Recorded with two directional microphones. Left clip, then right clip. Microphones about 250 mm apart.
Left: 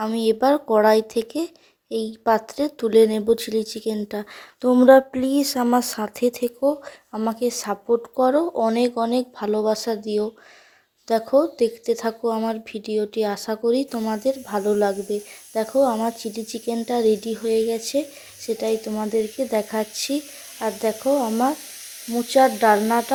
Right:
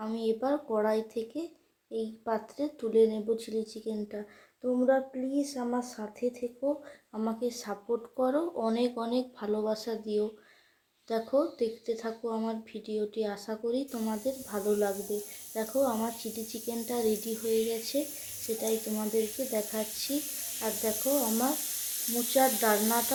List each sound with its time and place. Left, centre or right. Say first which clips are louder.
0.0 s speech: left 12 dB; left